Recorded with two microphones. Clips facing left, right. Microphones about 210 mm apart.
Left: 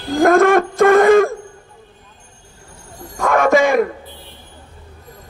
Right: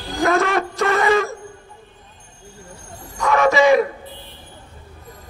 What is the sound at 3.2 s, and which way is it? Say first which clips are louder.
Music: left 2 dB; 50° left (ahead or behind).